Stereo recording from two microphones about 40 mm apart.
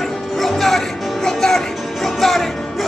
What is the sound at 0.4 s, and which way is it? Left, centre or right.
Music, centre.